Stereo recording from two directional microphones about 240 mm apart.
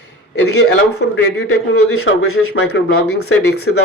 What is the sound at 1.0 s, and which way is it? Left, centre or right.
Speech, left.